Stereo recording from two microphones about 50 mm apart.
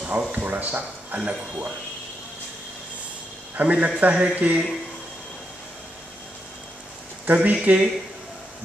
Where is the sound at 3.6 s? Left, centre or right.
Right.